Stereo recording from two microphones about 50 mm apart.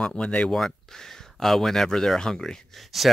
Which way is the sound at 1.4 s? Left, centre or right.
Centre.